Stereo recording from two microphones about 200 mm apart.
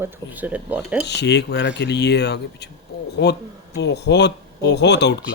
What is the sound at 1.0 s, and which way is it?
Speech, 60° left (ahead or behind).